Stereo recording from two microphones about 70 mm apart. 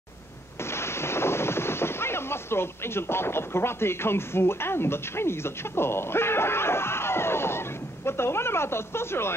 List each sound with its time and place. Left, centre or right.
0.6 s speech: left